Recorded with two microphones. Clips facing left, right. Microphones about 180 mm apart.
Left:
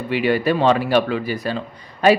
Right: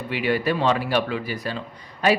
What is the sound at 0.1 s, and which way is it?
Speech, 30° left (ahead or behind).